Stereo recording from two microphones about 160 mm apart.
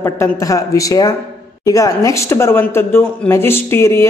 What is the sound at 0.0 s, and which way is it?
A man's voice, 20° left (ahead or behind).